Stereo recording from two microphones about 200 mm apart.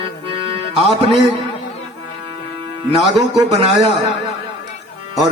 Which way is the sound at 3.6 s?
25° right (ahead or behind).